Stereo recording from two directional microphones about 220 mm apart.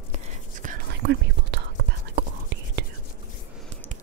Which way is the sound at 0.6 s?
45° right (ahead or behind).